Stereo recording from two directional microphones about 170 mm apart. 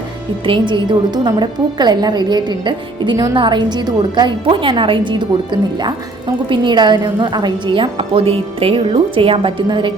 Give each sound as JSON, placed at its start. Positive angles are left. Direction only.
{"t": 0.4, "sound": "a woman's voice", "side_deg": -30}